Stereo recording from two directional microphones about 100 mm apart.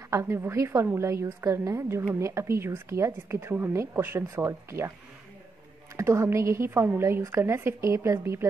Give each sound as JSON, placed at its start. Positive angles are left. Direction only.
{"t": 0.1, "sound": "a woman's voice", "side_deg": -25}
{"t": 5.9, "sound": "a woman's voice", "side_deg": -30}